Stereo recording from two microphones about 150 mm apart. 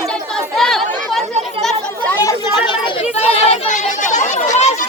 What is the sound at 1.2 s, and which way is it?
Chatter, 50° right (ahead or behind).